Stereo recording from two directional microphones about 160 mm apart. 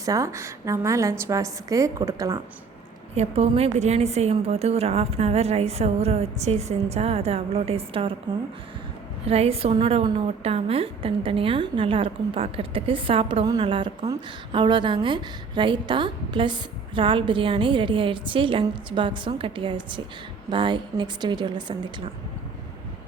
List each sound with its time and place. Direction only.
0.0 s a woman's voice: 20° right (ahead or behind)
3.2 s a woman's voice: 40° right (ahead or behind)
9.2 s a woman's voice: 40° right (ahead or behind)